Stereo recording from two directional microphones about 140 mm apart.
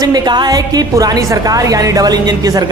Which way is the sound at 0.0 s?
30° right (ahead or behind).